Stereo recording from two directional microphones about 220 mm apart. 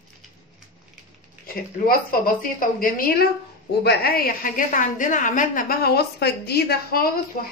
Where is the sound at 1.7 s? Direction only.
40° left (ahead or behind).